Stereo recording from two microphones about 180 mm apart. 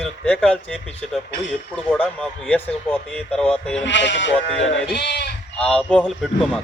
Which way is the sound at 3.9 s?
80° left.